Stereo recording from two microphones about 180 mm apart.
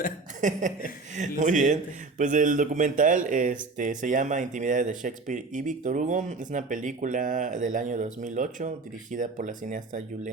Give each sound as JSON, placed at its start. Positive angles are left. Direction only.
{"t": 0.4, "sound": "a man's voice", "side_deg": -45}